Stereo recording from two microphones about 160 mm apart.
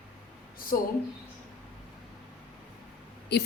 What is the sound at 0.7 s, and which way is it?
Speech, 60° left (ahead or behind).